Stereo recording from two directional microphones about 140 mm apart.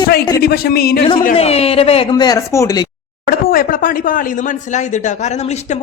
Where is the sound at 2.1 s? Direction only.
30° left (ahead or behind).